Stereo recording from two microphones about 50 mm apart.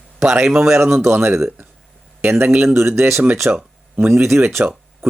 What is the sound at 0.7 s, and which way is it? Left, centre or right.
Speech, right.